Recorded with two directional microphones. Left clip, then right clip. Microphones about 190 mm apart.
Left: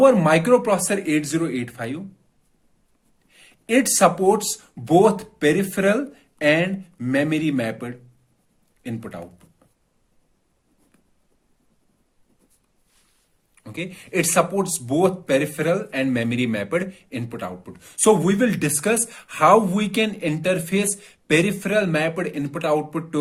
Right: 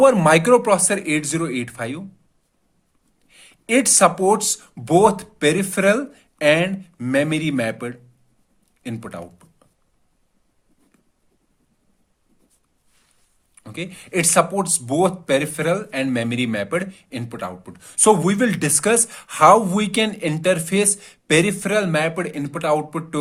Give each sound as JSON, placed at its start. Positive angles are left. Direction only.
{"t": 0.0, "sound": "speech", "side_deg": -35}
{"t": 3.2, "sound": "speech", "side_deg": -30}
{"t": 13.6, "sound": "speech", "side_deg": -20}